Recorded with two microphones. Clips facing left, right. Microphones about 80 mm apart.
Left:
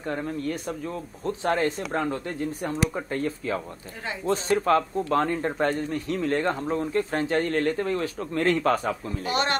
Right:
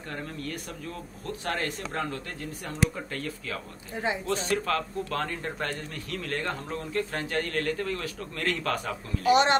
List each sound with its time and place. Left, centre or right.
0.1 s speech: left
9.3 s speech: right